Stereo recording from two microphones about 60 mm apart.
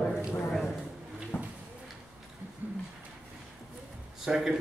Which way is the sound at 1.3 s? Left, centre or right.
Left.